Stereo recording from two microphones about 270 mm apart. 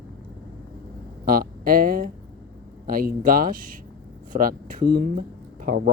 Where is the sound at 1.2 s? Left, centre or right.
Right.